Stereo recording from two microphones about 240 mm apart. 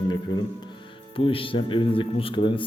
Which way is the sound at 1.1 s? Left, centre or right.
Left.